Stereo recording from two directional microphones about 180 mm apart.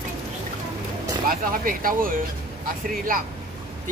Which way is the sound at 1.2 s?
50° right (ahead or behind).